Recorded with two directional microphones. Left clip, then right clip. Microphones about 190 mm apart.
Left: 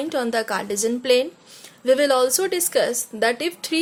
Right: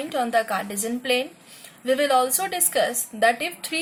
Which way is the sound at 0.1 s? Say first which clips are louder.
Right 2 dB; 45° left (ahead or behind).